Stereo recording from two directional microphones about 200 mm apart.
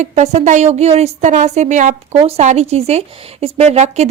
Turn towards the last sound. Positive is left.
turn(degrees=-35)  # may be behind; listen again after turning